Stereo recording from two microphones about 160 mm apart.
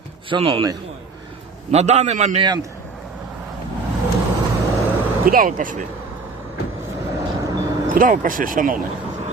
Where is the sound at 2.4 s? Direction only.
25° right (ahead or behind).